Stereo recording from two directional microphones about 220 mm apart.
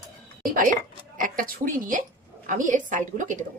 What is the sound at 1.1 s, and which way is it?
A woman's voice, 40° right (ahead or behind).